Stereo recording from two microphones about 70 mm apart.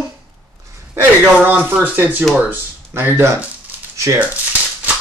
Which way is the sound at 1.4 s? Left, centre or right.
Right.